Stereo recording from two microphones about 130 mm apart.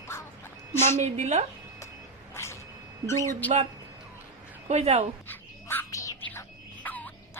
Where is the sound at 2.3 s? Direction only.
20° left (ahead or behind).